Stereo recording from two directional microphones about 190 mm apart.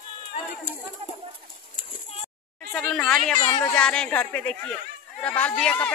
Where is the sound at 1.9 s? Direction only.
30° left (ahead or behind).